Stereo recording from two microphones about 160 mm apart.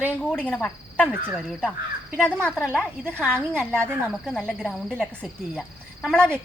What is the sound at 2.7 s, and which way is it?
Cricket, 5° left (ahead or behind).